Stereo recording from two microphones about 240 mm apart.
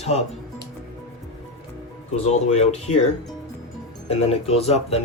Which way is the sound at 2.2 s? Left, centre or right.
Left.